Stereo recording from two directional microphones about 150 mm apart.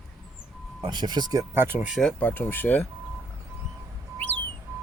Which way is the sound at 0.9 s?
30° right (ahead or behind).